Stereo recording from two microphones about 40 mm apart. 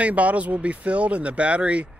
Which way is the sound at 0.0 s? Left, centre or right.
Right.